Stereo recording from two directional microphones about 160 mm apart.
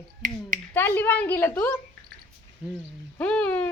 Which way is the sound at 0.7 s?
15° left (ahead or behind).